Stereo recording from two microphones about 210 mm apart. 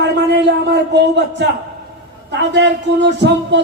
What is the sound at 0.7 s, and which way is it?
A man's voice, 55° right (ahead or behind).